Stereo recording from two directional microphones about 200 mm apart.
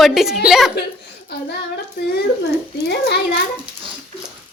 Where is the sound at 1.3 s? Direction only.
55° left (ahead or behind).